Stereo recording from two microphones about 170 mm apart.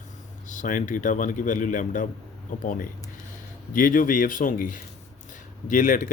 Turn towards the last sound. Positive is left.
turn(degrees=50)  # may be behind; listen again after turning